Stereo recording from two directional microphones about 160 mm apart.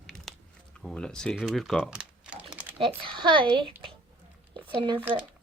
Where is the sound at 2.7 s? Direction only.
35° right (ahead or behind).